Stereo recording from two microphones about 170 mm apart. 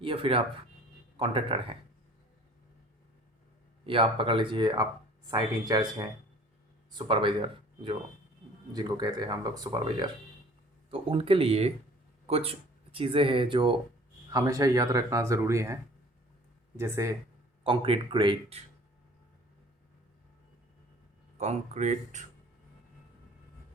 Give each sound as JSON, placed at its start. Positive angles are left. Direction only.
{"t": 0.0, "sound": "speech", "side_deg": -30}
{"t": 3.8, "sound": "speech", "side_deg": -30}
{"t": 17.6, "sound": "speech", "side_deg": -30}
{"t": 21.3, "sound": "speech", "side_deg": -40}